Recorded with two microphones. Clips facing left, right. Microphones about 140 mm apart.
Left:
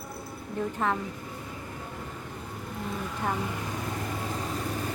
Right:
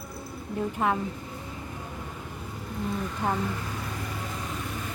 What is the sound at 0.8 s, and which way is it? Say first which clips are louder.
Speech: right 2 dB; 15° right (ahead or behind).